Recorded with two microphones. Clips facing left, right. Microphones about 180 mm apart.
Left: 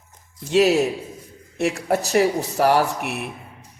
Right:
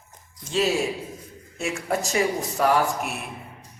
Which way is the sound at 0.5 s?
70° left (ahead or behind).